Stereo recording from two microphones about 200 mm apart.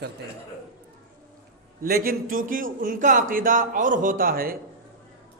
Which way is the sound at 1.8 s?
50° right (ahead or behind).